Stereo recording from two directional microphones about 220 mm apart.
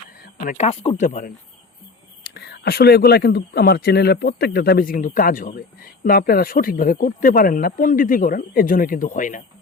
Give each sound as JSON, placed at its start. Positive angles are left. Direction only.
{"t": 0.3, "sound": "speech", "side_deg": 30}
{"t": 2.2, "sound": "speech", "side_deg": 50}